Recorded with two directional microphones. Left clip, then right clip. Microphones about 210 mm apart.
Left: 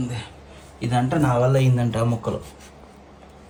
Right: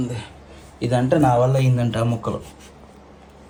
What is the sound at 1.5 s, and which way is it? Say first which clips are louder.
Speech: left 1 dB; 35° left (ahead or behind).